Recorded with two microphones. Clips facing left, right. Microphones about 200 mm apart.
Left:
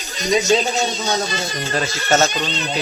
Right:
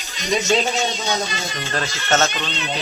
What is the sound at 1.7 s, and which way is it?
Speech, 15° left (ahead or behind).